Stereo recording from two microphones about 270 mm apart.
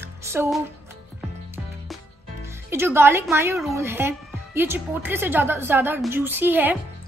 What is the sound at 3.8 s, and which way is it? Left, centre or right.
A woman's voice, centre.